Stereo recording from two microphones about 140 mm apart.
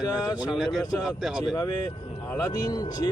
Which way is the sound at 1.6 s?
25° left (ahead or behind).